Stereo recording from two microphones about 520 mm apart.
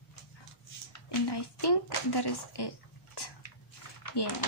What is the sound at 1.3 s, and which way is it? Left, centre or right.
A woman's voice, left.